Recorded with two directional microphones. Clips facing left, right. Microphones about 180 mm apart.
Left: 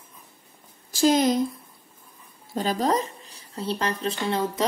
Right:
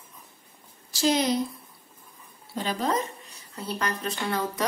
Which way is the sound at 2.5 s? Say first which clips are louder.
Left 4 dB; 40° left (ahead or behind).